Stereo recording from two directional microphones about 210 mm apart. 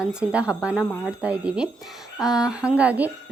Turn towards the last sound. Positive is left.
turn(degrees=-5)  # may be behind; listen again after turning